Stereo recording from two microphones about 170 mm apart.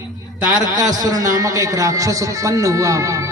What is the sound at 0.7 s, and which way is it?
A man's voice, 20° right (ahead or behind).